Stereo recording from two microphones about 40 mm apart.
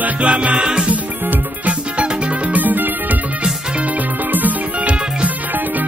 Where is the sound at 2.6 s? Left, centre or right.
Right.